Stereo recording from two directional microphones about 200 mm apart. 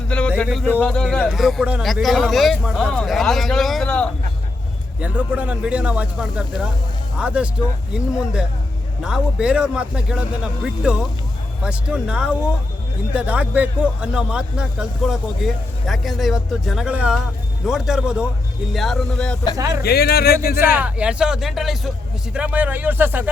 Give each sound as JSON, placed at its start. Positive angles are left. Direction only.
{"t": 0.1, "sound": "a sound", "side_deg": 5}
{"t": 0.7, "sound": "speech", "side_deg": 5}
{"t": 4.9, "sound": "speech", "side_deg": -5}
{"t": 19.5, "sound": "speech", "side_deg": -15}
{"t": 19.8, "sound": "speech", "side_deg": 55}
{"t": 20.7, "sound": "speech", "side_deg": -5}